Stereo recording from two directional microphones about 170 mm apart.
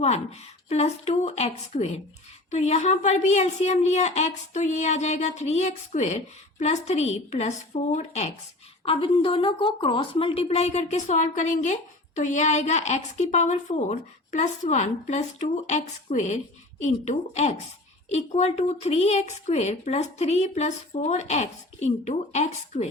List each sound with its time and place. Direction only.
0.0 s a woman's voice: 40° left (ahead or behind)
8.8 s a woman's voice: 30° left (ahead or behind)